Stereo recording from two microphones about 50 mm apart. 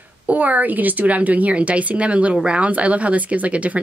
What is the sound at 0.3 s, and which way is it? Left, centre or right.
Speech, right.